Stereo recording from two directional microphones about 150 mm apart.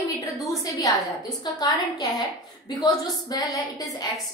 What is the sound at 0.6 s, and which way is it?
A woman's voice, 25° left (ahead or behind).